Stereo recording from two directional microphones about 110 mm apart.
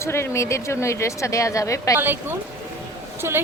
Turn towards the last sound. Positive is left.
turn(degrees=-25)  # may be behind; listen again after turning